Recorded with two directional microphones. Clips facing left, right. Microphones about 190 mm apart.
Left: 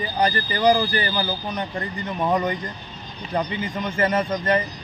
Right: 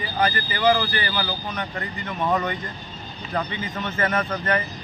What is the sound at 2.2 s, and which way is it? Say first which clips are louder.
Speech: left 2 dB; 15° left (ahead or behind).